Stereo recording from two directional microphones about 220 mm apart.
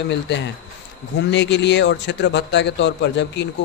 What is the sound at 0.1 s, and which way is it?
A man's voice, 50° left (ahead or behind).